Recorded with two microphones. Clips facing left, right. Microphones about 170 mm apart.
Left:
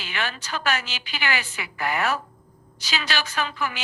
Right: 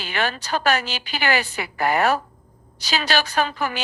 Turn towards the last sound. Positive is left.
turn(degrees=-40)  # may be behind; listen again after turning